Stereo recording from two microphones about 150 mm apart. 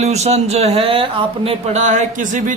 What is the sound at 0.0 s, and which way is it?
A man's voice, 45° right (ahead or behind).